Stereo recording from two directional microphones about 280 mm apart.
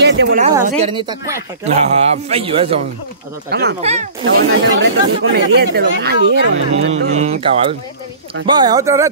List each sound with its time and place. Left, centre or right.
0.0 s a sound: right
0.7 s speech: right
3.4 s speech: right
3.8 s speech: right
4.2 s speech: right
7.1 s speech: right